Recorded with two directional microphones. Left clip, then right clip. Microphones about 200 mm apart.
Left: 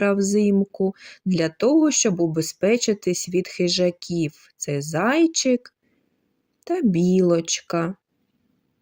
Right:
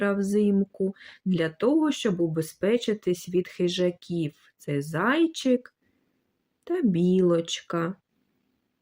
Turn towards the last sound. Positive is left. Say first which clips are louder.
# left 5 dB
turn(degrees=30)  # may be behind; listen again after turning